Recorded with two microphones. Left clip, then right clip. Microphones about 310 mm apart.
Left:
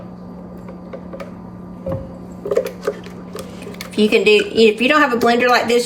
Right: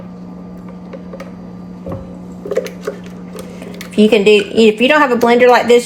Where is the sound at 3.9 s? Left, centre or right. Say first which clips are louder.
Right 4 dB; centre.